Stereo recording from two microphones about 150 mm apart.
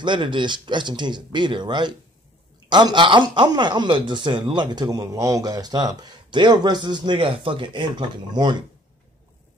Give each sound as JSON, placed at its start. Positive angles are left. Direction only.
{"t": 0.0, "sound": "speech", "side_deg": -30}